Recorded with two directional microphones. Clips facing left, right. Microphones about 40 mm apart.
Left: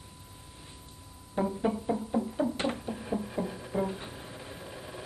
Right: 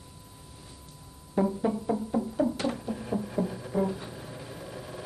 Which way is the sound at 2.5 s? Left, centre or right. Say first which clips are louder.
Right 1 dB; left.